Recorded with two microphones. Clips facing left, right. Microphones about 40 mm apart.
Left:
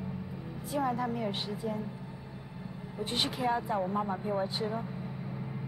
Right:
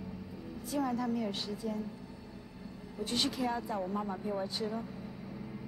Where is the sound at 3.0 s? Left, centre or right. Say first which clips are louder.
Left 2 dB; left.